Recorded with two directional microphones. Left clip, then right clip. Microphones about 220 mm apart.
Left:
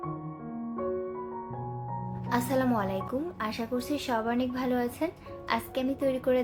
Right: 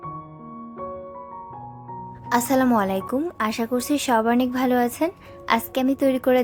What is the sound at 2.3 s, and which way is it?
A woman's voice, 45° right (ahead or behind).